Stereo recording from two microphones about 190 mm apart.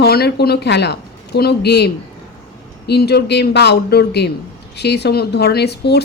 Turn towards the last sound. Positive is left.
turn(degrees=60)  # may be behind; listen again after turning